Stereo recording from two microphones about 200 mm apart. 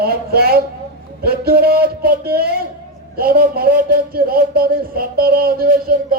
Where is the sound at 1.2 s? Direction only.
50° right (ahead or behind).